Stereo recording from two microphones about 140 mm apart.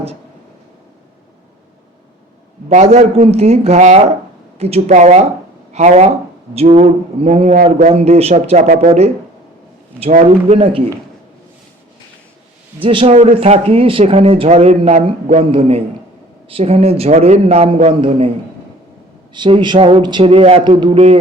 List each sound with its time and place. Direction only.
2.6 s a man's voice: 55° right (ahead or behind)
10.0 s a man's voice: 45° right (ahead or behind)
12.8 s a man's voice: 40° right (ahead or behind)
19.3 s speech: 35° right (ahead or behind)